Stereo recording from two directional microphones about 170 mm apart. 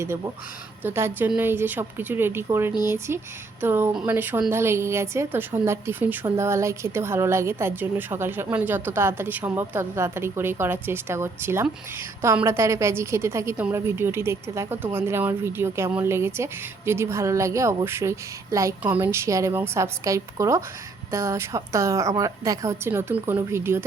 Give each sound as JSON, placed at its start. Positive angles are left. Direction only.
{"t": 0.8, "sound": "a woman's voice", "side_deg": -15}